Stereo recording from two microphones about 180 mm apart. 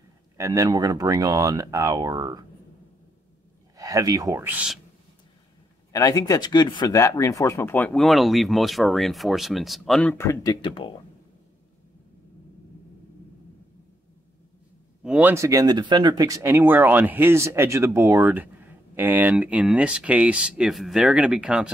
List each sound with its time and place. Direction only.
0.4 s speech: 20° right (ahead or behind)
3.7 s speech: 20° right (ahead or behind)
5.9 s speech: 20° left (ahead or behind)
15.0 s speech: 10° right (ahead or behind)